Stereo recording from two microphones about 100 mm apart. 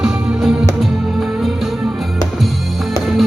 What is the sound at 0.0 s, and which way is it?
Music, 5° right (ahead or behind).